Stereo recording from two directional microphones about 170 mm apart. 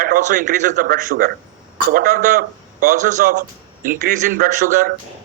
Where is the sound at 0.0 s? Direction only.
50° right (ahead or behind).